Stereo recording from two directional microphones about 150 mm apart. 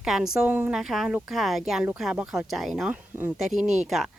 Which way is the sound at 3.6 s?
50° right (ahead or behind).